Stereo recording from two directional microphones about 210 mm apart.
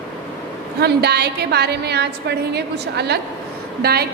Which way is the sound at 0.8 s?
50° right (ahead or behind).